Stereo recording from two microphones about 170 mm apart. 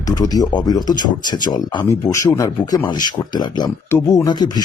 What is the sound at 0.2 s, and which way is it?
Speech, 20° left (ahead or behind).